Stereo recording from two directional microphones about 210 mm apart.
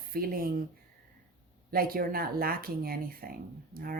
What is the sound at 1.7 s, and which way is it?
A woman's voice, 45° right (ahead or behind).